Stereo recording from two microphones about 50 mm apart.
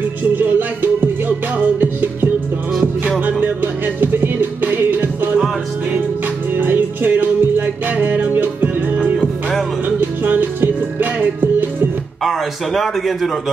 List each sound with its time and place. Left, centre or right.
0.4 s music: right
3.2 s music: right
6.5 s music: right
12.2 s speech: centre